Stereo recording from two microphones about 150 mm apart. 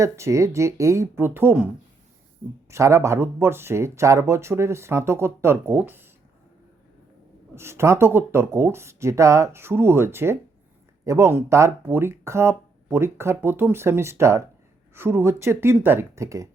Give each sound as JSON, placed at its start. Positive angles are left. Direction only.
{"t": 0.0, "sound": "speech", "side_deg": -20}
{"t": 7.5, "sound": "speech", "side_deg": -15}